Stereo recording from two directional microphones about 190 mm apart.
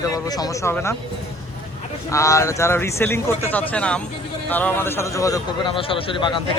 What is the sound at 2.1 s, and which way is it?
Speech, 15° left (ahead or behind).